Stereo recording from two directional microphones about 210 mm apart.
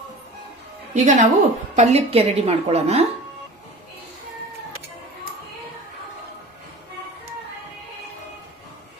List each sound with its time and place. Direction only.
0.9 s a woman's voice: 35° right (ahead or behind)